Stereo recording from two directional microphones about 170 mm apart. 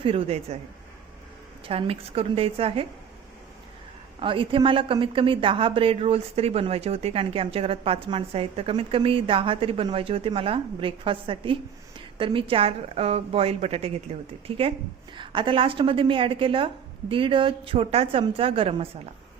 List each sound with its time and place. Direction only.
0.0 s speech: 35° right (ahead or behind)
1.6 s speech: 35° right (ahead or behind)
4.2 s speech: 30° right (ahead or behind)